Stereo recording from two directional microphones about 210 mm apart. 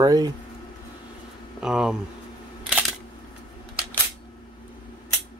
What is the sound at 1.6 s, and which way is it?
Speech, 5° right (ahead or behind).